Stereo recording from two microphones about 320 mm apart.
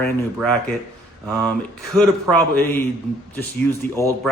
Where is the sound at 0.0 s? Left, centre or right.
Centre.